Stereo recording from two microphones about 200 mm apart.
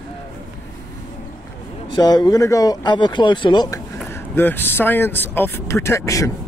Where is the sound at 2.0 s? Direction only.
20° left (ahead or behind).